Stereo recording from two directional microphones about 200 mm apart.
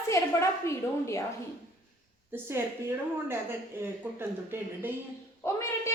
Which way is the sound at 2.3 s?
10° right (ahead or behind).